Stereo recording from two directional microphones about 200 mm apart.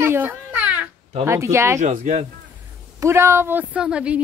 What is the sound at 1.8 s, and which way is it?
Speech, 35° right (ahead or behind).